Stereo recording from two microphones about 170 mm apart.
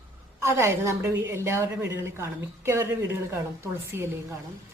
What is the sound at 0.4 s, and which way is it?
A woman's voice, 15° right (ahead or behind).